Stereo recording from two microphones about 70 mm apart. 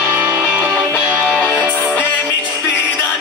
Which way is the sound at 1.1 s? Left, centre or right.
Centre.